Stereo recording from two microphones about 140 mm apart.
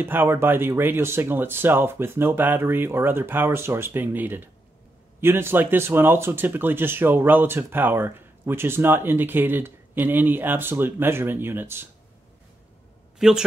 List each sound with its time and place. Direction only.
0.0 s speech: 15° right (ahead or behind)
13.2 s a man's voice: 5° right (ahead or behind)